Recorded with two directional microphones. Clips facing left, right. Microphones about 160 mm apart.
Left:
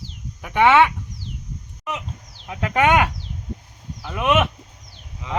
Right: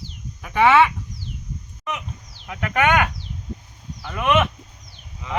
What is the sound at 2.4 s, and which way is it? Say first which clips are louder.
Speech: left 2 dB; 25° left (ahead or behind).